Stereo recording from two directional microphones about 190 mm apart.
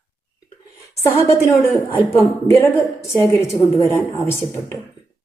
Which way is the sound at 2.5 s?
15° left (ahead or behind).